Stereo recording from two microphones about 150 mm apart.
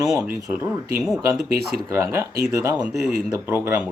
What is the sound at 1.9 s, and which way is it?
Speech, 20° right (ahead or behind).